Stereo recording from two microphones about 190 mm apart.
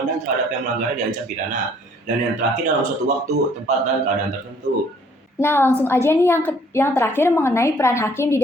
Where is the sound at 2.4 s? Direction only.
40° right (ahead or behind).